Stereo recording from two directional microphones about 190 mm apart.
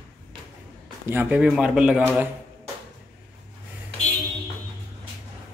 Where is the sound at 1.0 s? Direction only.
10° right (ahead or behind).